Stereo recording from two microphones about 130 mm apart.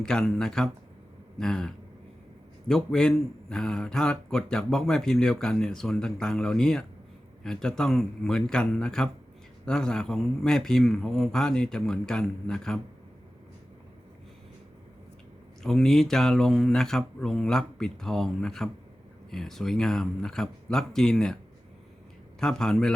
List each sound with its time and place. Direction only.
0.0 s a man's voice: 5° left (ahead or behind)
15.6 s a man's voice: 5° left (ahead or behind)
22.4 s a man's voice: 5° left (ahead or behind)